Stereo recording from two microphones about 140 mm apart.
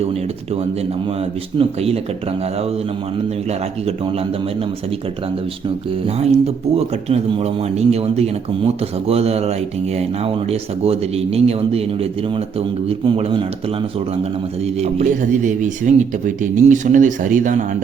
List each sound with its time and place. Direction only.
0.0 s speech: 45° right (ahead or behind)
6.1 s speech: 50° right (ahead or behind)
14.6 s speech: 50° right (ahead or behind)
15.0 s speech: 65° right (ahead or behind)